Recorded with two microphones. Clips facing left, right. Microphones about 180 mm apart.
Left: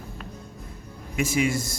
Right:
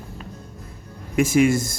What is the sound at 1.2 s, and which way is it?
Speech, 50° right (ahead or behind).